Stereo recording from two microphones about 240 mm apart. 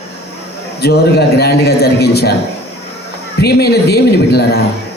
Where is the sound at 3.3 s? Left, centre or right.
Left.